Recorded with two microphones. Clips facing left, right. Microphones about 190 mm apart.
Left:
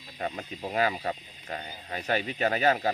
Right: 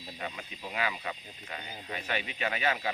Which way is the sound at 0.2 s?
40° left (ahead or behind).